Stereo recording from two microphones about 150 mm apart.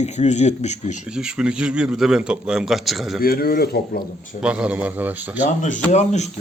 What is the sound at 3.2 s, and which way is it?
Speech, 80° left.